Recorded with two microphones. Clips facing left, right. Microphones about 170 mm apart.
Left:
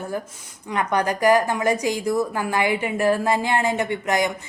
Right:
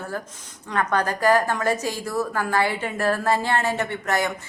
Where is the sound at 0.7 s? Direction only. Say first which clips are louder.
Left 1 dB; 15° left (ahead or behind).